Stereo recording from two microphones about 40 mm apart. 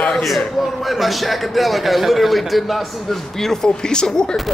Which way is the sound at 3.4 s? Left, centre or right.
Centre.